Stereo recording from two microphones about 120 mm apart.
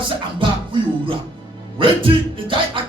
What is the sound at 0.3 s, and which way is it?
Music, 45° right (ahead or behind).